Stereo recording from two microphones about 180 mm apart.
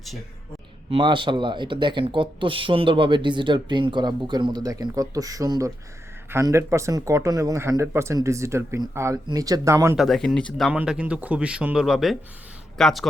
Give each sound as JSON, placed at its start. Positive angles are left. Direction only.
{"t": 0.9, "sound": "speech", "side_deg": -30}
{"t": 10.0, "sound": "speech", "side_deg": 0}
{"t": 10.7, "sound": "speech", "side_deg": -5}